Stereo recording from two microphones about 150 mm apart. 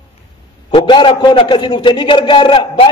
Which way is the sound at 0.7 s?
30° left (ahead or behind).